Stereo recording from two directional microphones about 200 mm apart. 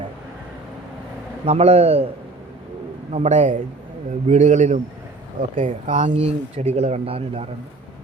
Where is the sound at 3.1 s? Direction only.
35° right (ahead or behind).